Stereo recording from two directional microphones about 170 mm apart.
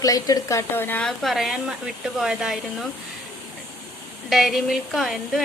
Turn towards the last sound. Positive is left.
turn(degrees=0)  # may be behind; listen again after turning